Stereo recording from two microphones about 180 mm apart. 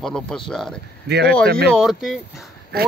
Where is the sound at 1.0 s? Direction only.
65° right (ahead or behind).